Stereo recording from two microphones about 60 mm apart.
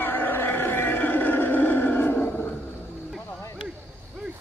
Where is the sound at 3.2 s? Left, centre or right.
Left.